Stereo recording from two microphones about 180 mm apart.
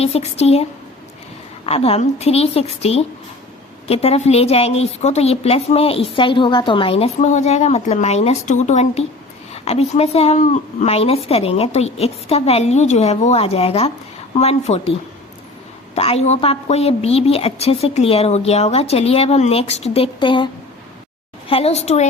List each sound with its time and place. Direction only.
0.0 s a woman's voice: 35° left (ahead or behind)
16.0 s a woman's voice: 35° left (ahead or behind)
21.5 s a woman's voice: 35° left (ahead or behind)